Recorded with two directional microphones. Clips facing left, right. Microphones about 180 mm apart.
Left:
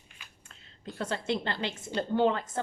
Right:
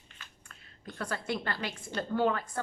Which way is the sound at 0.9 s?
25° left (ahead or behind).